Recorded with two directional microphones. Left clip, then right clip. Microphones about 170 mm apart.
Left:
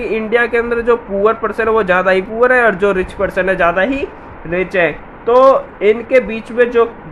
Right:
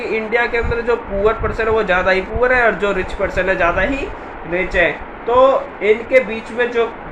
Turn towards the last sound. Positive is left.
turn(degrees=70)  # may be behind; listen again after turning